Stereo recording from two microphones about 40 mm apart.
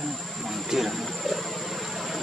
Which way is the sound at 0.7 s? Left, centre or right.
Centre.